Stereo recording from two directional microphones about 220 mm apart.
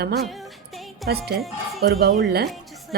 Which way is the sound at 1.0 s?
45° right (ahead or behind).